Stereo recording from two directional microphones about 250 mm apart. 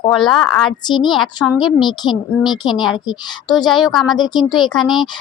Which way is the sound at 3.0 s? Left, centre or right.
Centre.